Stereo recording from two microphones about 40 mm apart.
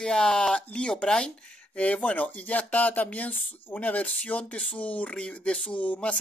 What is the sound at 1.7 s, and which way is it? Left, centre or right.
Speech, left.